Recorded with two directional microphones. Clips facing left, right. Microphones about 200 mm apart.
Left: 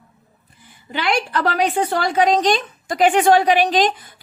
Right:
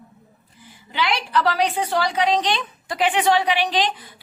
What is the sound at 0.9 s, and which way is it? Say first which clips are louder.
A woman's voice: left 3 dB; 50° left (ahead or behind).